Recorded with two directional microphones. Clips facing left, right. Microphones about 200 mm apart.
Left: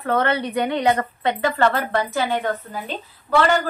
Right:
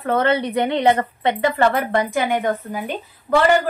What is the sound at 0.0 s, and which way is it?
A woman's voice, 25° right (ahead or behind).